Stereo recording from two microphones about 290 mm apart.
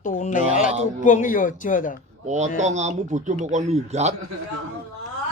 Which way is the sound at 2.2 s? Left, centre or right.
Right.